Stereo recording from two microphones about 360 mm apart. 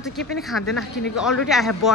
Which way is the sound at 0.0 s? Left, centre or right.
Centre.